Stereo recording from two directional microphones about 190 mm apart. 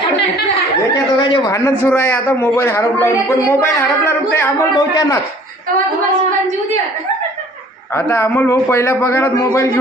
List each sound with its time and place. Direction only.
1.2 s a man's voice: 25° left (ahead or behind)
7.9 s a man's voice: 15° left (ahead or behind)